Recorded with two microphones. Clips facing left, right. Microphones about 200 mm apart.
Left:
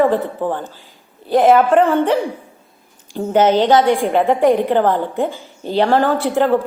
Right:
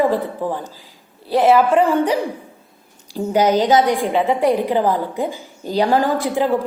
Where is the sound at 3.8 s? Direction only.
Centre (ahead or behind).